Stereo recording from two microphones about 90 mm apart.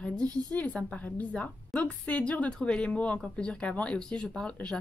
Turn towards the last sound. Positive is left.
turn(degrees=10)  # may be behind; listen again after turning